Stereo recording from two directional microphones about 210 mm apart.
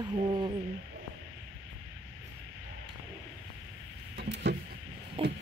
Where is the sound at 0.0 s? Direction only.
20° right (ahead or behind).